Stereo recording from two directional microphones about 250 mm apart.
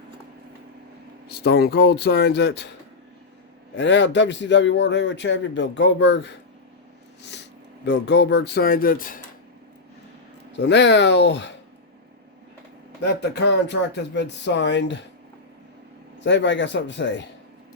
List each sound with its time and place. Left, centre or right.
1.3 s speech: left
3.8 s speech: left
7.2 s snort: left
7.9 s speech: left
10.5 s speech: left
13.0 s speech: left
16.2 s speech: left